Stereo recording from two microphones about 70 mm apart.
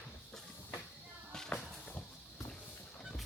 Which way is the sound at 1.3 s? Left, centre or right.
Centre.